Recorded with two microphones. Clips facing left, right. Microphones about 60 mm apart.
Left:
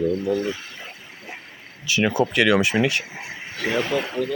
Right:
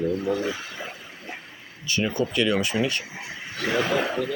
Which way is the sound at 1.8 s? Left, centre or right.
Left.